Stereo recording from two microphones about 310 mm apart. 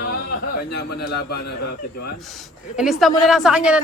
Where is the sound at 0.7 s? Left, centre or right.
Left.